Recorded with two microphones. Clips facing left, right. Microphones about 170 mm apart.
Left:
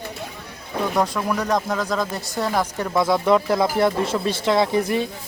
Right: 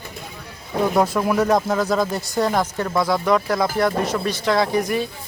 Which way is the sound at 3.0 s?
25° left (ahead or behind).